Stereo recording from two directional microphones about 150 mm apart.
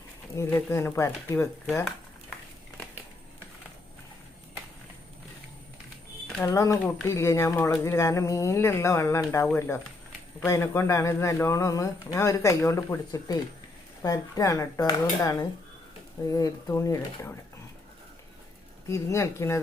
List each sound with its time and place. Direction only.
0.3 s speech: 15° left (ahead or behind)
6.4 s speech: 20° left (ahead or behind)
18.9 s speech: 20° left (ahead or behind)